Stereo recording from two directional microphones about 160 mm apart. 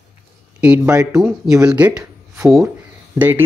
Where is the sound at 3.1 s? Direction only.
10° right (ahead or behind).